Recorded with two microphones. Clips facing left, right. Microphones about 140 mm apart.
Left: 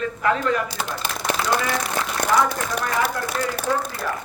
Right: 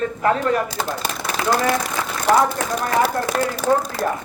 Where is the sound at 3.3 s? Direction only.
70° right (ahead or behind).